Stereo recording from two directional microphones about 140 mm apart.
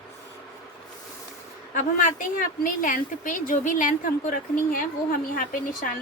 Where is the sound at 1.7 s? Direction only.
70° left (ahead or behind).